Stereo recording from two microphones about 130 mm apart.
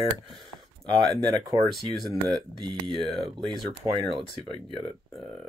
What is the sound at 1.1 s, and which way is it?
Speech, 30° right (ahead or behind).